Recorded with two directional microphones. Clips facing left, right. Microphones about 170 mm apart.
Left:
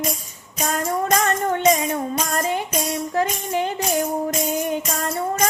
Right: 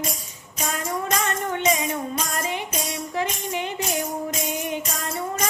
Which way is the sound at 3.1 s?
40° left (ahead or behind).